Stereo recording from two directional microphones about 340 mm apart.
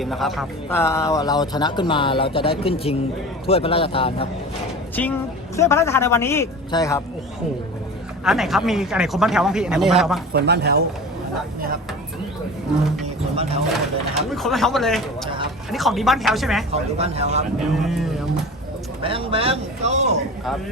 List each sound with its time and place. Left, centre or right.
0.0 s a man's voice: centre
5.5 s a man's voice: centre
8.2 s speech: centre
10.3 s speech: right
14.3 s speech: centre
16.7 s speech: centre
17.6 s speech: centre
19.0 s speech: centre